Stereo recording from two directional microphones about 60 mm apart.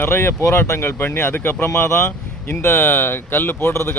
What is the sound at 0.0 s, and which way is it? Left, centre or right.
Speech, left.